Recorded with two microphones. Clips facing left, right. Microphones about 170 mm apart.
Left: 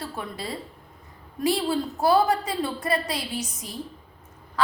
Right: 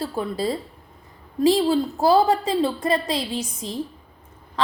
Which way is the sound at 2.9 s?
90° right.